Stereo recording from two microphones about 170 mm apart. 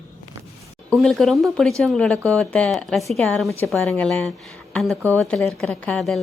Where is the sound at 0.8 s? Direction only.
Centre (ahead or behind).